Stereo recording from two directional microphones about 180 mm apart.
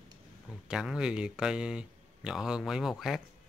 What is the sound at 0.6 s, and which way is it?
Mantra, 5° right (ahead or behind).